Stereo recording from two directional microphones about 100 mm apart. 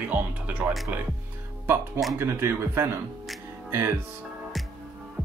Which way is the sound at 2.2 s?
25° right (ahead or behind).